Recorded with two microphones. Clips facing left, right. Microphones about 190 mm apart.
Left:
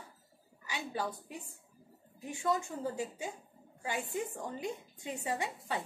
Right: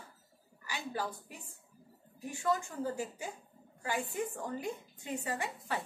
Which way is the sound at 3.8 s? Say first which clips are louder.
Right 1 dB; 20° left (ahead or behind).